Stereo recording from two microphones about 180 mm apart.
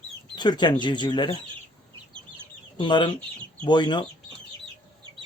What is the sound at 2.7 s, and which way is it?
Speech, 25° left (ahead or behind).